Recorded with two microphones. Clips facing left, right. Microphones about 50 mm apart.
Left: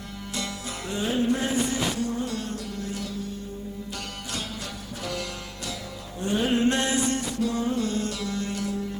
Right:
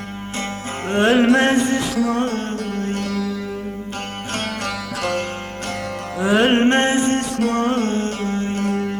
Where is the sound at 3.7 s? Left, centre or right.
Right.